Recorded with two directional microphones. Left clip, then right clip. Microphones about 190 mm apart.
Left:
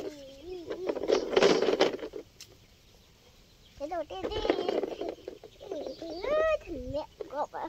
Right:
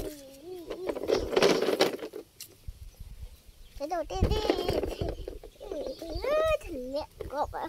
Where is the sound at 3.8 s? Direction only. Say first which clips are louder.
Right 3 dB; 40° right (ahead or behind).